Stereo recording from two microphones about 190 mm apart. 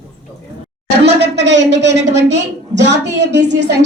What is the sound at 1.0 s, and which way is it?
A woman's voice, 65° right (ahead or behind).